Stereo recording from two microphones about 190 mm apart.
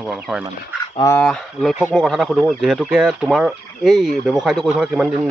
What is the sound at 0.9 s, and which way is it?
Speech, 15° left (ahead or behind).